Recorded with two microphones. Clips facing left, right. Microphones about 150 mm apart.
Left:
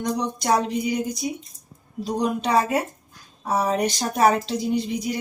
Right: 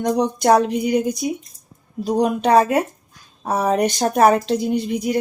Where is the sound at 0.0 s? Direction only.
55° right (ahead or behind).